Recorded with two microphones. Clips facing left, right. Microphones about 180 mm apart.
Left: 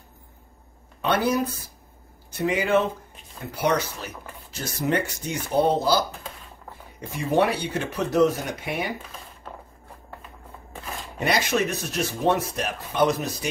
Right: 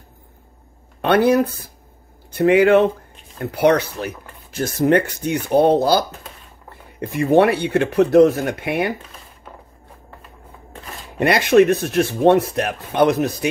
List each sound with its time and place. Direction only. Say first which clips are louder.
1.0 s speech: right 8 dB; 65° right (ahead or behind)
11.1 s speech: right 10 dB; 60° right (ahead or behind)